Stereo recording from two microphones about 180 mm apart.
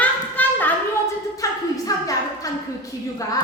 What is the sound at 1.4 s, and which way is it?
Music, 20° left (ahead or behind).